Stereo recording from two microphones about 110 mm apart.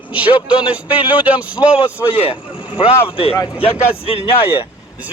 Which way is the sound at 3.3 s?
30° left (ahead or behind).